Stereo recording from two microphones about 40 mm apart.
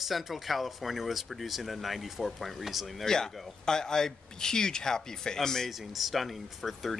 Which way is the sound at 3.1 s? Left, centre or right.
Centre.